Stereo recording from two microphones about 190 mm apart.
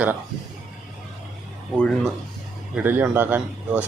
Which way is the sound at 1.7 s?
5° left (ahead or behind).